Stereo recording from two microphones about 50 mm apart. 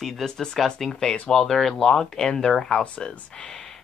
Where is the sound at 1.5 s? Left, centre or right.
Centre.